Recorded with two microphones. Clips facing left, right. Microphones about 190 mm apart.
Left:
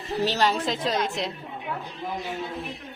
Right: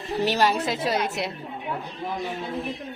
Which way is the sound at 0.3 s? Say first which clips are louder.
Right 2 dB; 10° right (ahead or behind).